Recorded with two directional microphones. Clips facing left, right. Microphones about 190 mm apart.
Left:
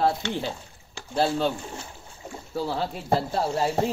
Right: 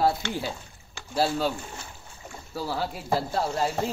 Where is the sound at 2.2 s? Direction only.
20° left (ahead or behind).